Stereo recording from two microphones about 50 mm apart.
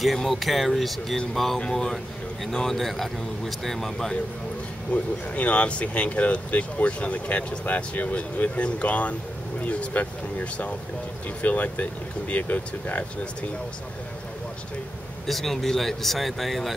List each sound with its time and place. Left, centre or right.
0.0 s speech: centre
4.9 s speech: left
15.2 s speech: centre